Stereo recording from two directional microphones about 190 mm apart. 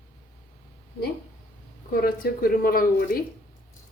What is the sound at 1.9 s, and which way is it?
Speech, 50° left (ahead or behind).